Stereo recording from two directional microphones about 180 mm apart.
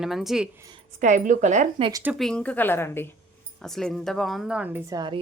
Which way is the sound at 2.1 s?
5° left (ahead or behind).